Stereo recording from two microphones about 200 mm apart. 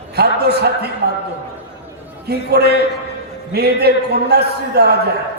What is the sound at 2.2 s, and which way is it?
A man's voice, 55° right (ahead or behind).